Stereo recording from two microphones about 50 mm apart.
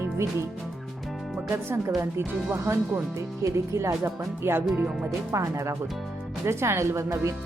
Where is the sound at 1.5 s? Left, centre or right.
Right.